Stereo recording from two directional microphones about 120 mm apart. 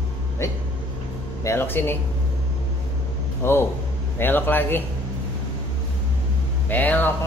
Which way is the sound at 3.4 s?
20° left (ahead or behind).